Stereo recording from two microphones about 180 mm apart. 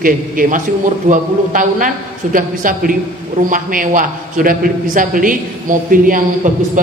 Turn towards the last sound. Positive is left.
turn(degrees=-50)  # may be behind; listen again after turning